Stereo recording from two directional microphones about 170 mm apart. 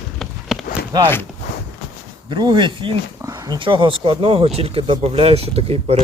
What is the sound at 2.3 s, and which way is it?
Speech, 25° right (ahead or behind).